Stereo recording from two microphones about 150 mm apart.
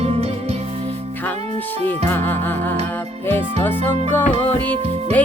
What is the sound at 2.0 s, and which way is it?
Music, 15° left (ahead or behind).